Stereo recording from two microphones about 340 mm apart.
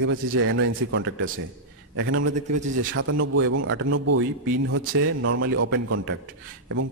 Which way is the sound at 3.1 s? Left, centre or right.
Right.